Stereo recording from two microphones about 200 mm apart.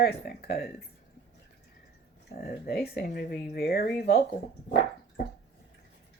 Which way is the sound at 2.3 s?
50° left (ahead or behind).